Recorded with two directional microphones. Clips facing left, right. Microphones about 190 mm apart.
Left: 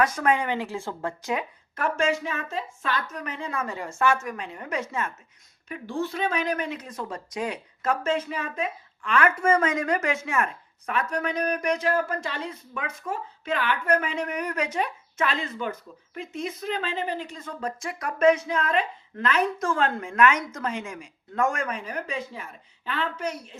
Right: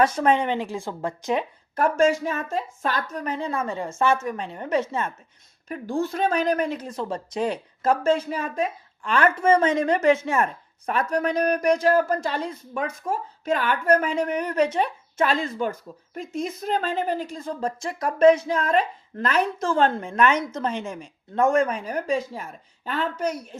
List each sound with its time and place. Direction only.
0.0 s speech: 25° right (ahead or behind)
1.7 s speech: 40° right (ahead or behind)
5.6 s speech: 45° right (ahead or behind); by 14.8 s 30° right (ahead or behind)
15.2 s speech: 40° right (ahead or behind)
19.5 s a woman's voice: 30° right (ahead or behind); by 23.6 s 45° right (ahead or behind)